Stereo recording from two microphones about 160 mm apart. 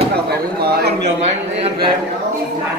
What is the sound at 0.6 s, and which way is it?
Speech, 80° right.